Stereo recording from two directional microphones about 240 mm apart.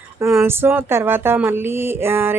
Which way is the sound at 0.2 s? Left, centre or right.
Centre.